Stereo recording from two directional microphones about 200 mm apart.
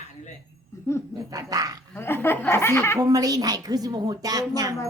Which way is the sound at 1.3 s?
15° right (ahead or behind).